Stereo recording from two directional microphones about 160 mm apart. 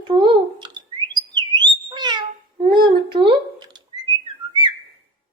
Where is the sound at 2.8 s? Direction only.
30° right (ahead or behind).